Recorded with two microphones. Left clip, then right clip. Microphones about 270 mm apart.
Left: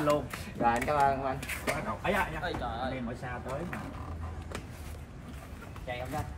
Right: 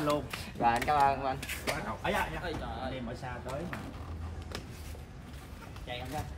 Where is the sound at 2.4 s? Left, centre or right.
Centre.